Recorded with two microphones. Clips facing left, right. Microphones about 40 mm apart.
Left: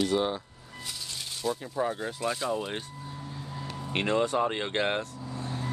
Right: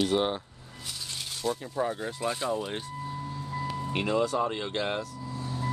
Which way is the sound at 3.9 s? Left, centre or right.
Left.